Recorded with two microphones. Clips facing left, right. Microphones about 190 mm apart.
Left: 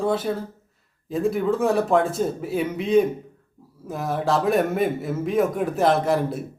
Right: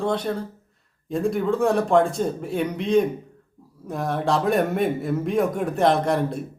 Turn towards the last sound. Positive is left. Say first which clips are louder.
# left 1 dB
turn(degrees=5)  # may be behind; listen again after turning